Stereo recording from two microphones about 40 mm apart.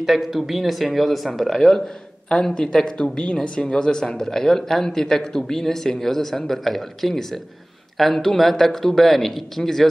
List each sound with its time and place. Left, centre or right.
0.0 s a woman's voice: centre